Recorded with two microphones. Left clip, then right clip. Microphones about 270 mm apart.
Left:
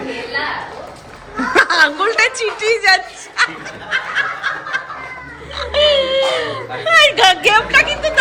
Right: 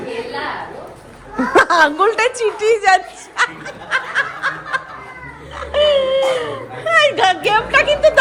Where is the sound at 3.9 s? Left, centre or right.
Centre.